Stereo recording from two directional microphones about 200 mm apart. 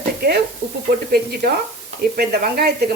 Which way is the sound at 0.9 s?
50° right (ahead or behind).